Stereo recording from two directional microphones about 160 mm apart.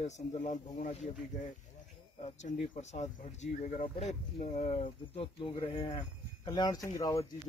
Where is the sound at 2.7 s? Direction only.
45° left (ahead or behind); by 7.2 s 20° left (ahead or behind).